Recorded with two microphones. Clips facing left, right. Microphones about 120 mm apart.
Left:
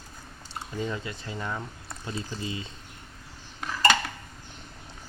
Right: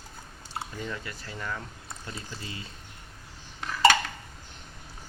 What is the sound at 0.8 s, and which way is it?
Speech, 20° left (ahead or behind).